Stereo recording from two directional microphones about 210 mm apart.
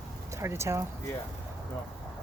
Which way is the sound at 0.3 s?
10° right (ahead or behind).